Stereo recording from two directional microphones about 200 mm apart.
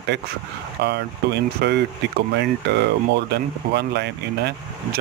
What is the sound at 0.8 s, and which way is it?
Speech, 55° right (ahead or behind).